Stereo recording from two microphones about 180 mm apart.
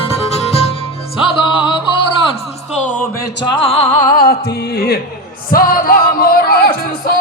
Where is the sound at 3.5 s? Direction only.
35° left (ahead or behind).